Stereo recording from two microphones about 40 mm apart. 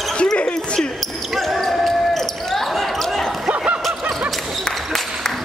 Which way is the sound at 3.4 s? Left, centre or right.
Right.